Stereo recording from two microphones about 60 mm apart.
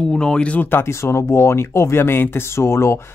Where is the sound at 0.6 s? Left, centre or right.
Left.